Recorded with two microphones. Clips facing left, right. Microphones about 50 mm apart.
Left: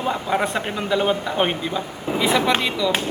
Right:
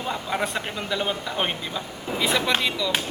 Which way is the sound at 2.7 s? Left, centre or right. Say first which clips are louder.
Left 4 dB; centre.